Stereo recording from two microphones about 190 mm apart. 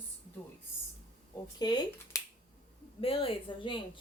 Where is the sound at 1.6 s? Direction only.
20° left (ahead or behind).